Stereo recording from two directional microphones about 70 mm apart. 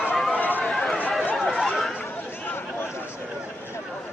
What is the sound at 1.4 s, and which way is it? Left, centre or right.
Chatter, centre.